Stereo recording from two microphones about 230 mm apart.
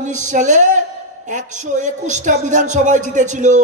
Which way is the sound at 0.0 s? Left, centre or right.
Right.